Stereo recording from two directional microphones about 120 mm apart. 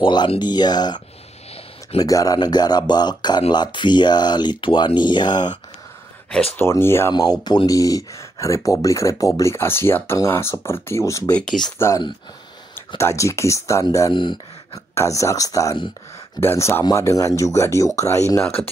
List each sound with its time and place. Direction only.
0.0 s speech: 40° left (ahead or behind)
6.6 s speech: 20° left (ahead or behind)
7.1 s speech: 35° left (ahead or behind)
11.3 s speech: 5° left (ahead or behind)
12.7 s speech: 25° left (ahead or behind)